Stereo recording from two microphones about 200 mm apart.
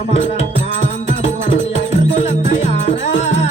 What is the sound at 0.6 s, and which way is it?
Music, 35° left (ahead or behind).